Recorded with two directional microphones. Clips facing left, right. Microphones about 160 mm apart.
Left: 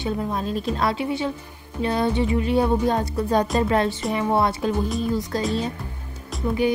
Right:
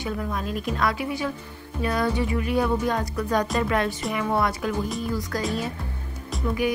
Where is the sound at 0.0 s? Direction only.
30° left (ahead or behind).